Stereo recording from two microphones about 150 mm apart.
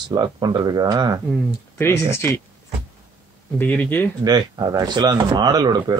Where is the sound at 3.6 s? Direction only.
10° left (ahead or behind).